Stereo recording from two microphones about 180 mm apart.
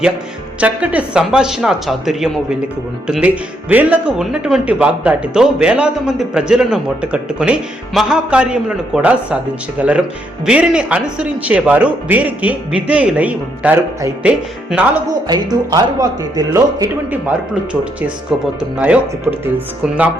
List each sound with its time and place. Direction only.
0.6 s speech: 10° right (ahead or behind)
15.3 s speech: 20° right (ahead or behind)
18.8 s speech: 5° right (ahead or behind)